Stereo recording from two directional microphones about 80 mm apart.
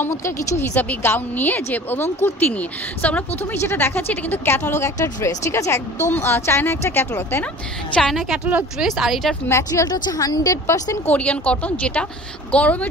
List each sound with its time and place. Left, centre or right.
0.1 s speech: left
0.7 s a woman's voice: left
8.1 s speech: centre
9.5 s speech: left
9.8 s a woman's voice: left
11.1 s a woman's voice: centre